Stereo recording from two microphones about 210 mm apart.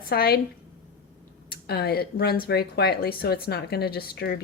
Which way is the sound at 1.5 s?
45° left (ahead or behind).